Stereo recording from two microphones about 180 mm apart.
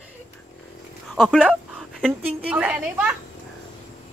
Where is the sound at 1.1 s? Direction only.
Centre (ahead or behind).